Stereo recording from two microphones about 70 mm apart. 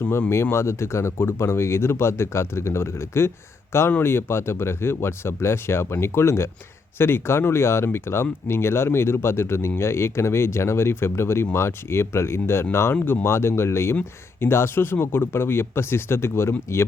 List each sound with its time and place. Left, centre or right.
0.5 s speech: left